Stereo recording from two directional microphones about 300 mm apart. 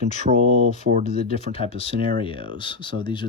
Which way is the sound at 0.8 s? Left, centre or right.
Right.